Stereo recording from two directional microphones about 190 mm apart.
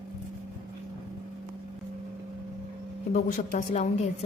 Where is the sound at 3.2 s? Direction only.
40° left (ahead or behind).